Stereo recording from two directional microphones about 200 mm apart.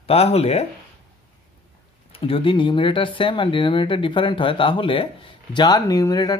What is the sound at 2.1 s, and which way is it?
Speech, 25° left (ahead or behind).